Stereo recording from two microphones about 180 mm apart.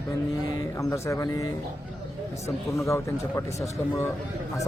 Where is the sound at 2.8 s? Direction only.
15° left (ahead or behind).